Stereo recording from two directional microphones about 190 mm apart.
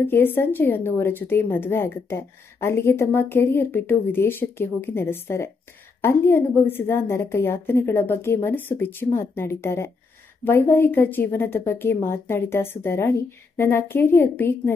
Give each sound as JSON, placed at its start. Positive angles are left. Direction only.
{"t": 0.0, "sound": "a woman's voice", "side_deg": 10}